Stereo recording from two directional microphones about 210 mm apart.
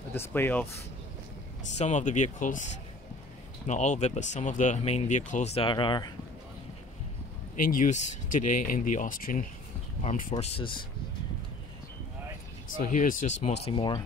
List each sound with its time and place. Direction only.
0.1 s speech: 10° left (ahead or behind)
1.8 s speech: 35° left (ahead or behind)
7.7 s speech: 40° left (ahead or behind)
10.4 s speech: 25° left (ahead or behind)
12.7 s speech: 40° left (ahead or behind); by 14.0 s 20° left (ahead or behind)